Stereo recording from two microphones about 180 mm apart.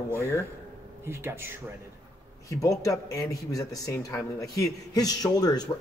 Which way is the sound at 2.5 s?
20° left (ahead or behind).